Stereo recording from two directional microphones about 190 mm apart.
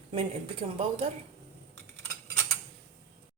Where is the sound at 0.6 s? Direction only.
45° right (ahead or behind).